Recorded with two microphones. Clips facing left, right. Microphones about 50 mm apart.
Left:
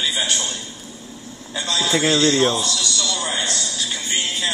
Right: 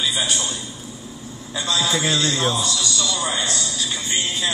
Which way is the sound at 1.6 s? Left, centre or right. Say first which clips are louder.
Left 1 dB; left.